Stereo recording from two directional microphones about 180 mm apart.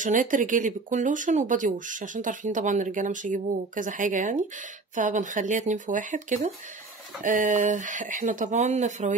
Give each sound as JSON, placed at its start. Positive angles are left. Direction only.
{"t": 0.0, "sound": "speech", "side_deg": -45}